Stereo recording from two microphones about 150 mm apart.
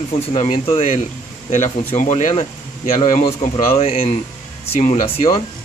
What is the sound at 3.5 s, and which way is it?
Speech, 40° left (ahead or behind).